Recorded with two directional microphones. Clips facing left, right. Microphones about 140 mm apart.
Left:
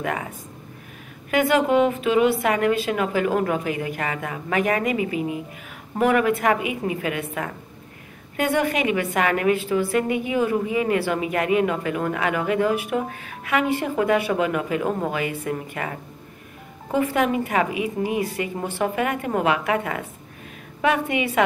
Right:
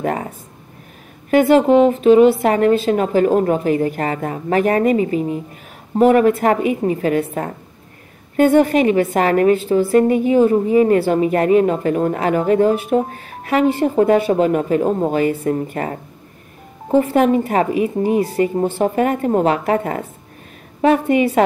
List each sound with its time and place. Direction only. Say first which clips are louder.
0.0 s a woman's voice: right 6 dB; 35° right (ahead or behind)
1.3 s a woman's voice: right 7 dB; 30° right (ahead or behind)